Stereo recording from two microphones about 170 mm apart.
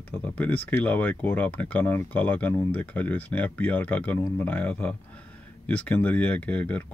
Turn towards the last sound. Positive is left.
turn(degrees=10)  # may be behind; listen again after turning